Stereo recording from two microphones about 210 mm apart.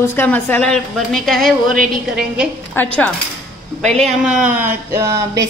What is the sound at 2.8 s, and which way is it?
A woman's voice, 10° left (ahead or behind).